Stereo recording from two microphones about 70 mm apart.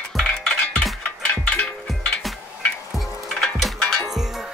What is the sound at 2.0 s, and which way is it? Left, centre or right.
Music, centre.